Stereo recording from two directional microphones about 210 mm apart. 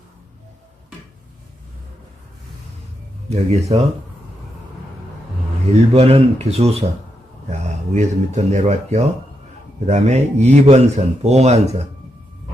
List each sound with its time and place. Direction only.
3.2 s speech: 30° right (ahead or behind)
5.9 s speech: 30° right (ahead or behind)